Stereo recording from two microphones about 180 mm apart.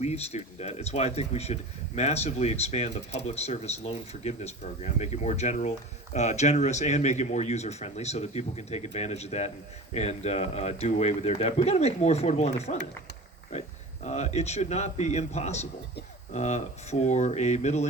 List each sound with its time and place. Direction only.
0.0 s speech: 35° left (ahead or behind)